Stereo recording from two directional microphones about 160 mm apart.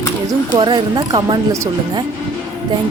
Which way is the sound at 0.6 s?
30° right (ahead or behind).